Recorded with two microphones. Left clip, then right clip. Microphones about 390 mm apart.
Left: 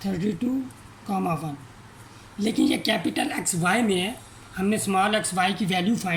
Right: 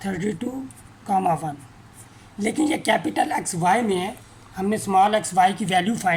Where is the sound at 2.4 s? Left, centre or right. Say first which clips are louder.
Right 1 dB; centre.